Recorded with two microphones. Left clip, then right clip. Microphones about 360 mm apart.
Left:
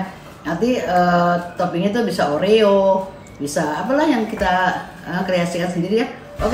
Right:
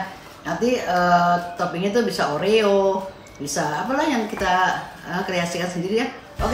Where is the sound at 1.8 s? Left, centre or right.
Centre.